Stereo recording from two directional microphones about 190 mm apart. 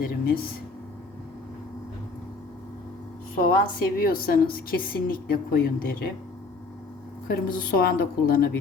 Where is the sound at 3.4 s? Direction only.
50° left (ahead or behind).